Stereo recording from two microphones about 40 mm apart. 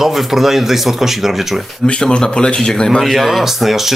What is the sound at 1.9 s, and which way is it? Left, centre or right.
Speech, left.